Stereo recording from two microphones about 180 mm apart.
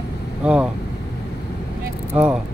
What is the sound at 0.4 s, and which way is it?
Speech, 5° right (ahead or behind).